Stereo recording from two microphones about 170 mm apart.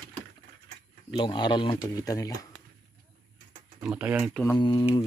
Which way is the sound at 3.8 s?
10° right (ahead or behind).